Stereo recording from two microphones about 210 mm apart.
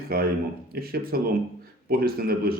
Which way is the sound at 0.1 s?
45° right (ahead or behind).